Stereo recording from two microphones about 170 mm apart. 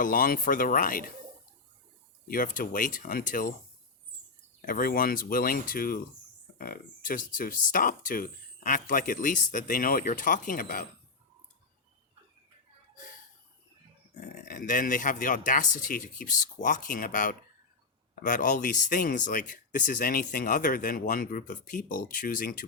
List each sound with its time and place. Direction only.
0.0 s speech: 55° left (ahead or behind)
2.2 s speech: 55° left (ahead or behind)
4.6 s speech: 55° left (ahead or behind)
14.5 s speech: 50° left (ahead or behind)